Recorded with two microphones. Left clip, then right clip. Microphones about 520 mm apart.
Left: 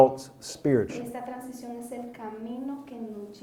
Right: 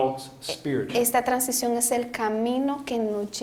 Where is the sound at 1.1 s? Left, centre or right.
Right.